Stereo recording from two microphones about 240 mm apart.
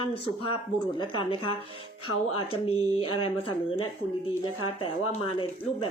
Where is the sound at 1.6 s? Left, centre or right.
Left.